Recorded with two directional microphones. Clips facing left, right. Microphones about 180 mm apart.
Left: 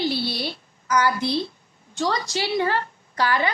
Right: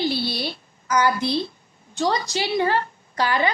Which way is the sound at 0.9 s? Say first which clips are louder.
Right 1 dB; 20° right (ahead or behind).